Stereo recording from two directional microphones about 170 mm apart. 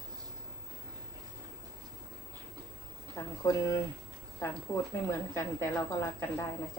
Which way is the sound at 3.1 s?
15° left (ahead or behind).